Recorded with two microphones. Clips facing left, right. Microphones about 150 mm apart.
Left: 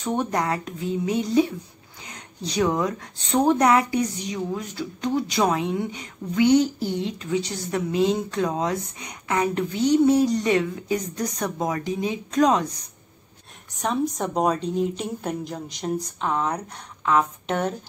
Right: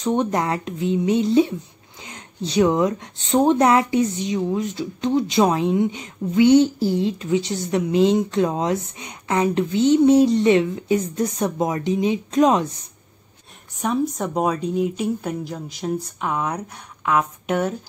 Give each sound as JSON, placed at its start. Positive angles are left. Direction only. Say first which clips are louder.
{"t": 0.0, "sound": "a woman's voice", "louder": "right 4 dB", "side_deg": -20}
{"t": 13.7, "sound": "a woman's voice", "louder": "right 2 dB", "side_deg": -5}